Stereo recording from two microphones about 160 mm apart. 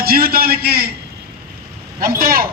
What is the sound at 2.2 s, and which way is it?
Speech, 65° right (ahead or behind).